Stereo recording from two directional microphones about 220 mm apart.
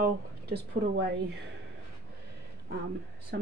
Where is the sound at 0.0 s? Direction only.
50° right (ahead or behind).